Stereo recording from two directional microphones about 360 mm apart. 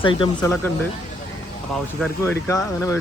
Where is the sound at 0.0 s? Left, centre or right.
Centre.